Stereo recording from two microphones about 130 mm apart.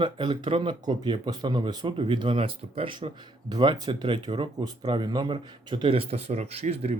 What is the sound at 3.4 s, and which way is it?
Speech, 35° right (ahead or behind).